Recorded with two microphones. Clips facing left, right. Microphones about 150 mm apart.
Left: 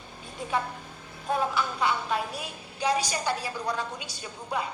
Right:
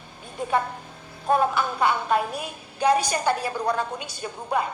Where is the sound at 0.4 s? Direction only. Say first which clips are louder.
Right 5 dB; 55° right (ahead or behind).